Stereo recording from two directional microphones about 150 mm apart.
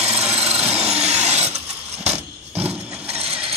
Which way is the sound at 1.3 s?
45° right (ahead or behind).